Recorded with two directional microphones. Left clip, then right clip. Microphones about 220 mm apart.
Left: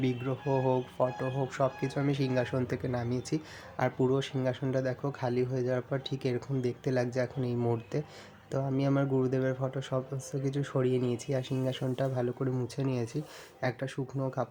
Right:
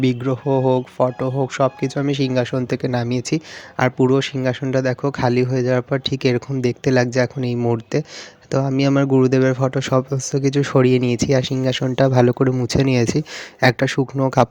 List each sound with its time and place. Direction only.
0.0 s speech: 35° right (ahead or behind)